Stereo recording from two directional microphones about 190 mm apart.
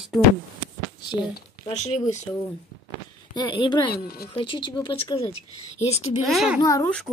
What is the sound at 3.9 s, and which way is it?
Speech, 55° left (ahead or behind).